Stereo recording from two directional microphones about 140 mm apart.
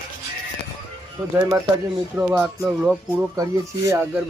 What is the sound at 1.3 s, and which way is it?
Speech, 25° right (ahead or behind).